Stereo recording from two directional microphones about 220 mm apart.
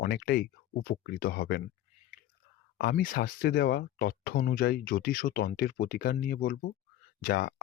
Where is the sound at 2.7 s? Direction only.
45° left (ahead or behind).